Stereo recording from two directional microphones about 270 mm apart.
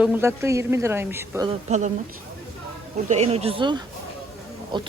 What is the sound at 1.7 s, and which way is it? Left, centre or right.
Speech, right.